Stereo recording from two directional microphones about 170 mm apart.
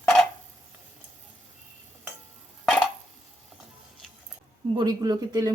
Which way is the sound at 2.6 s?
Centre (ahead or behind).